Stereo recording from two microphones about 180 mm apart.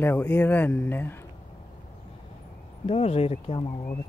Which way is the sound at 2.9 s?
35° left (ahead or behind).